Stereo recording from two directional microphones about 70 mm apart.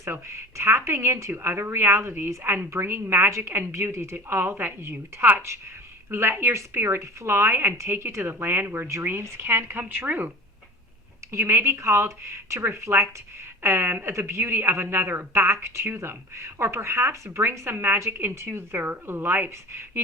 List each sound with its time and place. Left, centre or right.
0.0 s speech: right
11.3 s speech: right